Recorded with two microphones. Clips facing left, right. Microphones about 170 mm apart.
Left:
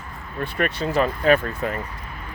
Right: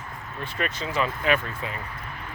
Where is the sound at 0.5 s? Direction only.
55° left (ahead or behind).